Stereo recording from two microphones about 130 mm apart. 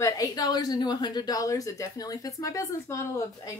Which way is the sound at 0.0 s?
30° left (ahead or behind).